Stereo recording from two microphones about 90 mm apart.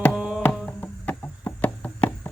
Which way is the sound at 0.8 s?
20° left (ahead or behind).